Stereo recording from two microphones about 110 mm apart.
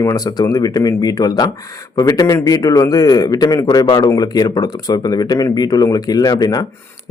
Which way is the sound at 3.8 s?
50° left (ahead or behind).